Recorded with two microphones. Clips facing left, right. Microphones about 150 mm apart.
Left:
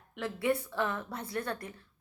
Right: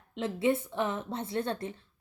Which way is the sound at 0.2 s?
25° right (ahead or behind).